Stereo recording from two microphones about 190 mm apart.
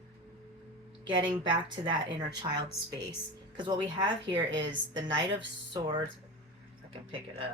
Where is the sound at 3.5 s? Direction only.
25° right (ahead or behind).